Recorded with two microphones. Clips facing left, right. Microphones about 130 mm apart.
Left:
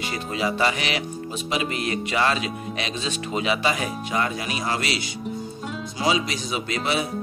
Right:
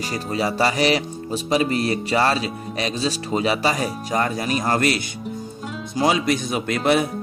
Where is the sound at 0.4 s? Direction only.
40° right (ahead or behind).